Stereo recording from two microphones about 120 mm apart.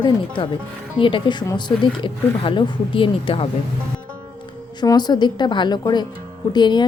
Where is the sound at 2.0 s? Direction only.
45° left (ahead or behind).